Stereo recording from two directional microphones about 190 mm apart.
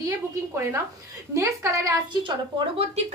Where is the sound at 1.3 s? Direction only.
15° right (ahead or behind).